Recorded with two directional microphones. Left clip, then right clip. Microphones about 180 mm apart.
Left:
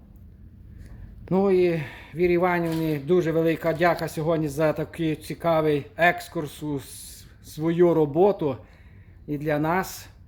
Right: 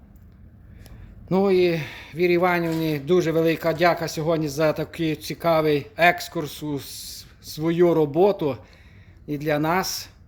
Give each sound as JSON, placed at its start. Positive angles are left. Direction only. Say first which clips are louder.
{"t": 1.3, "sound": "speech", "louder": "right 1 dB", "side_deg": 0}